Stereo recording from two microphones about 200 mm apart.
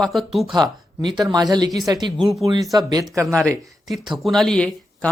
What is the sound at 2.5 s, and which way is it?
Speech, 20° right (ahead or behind).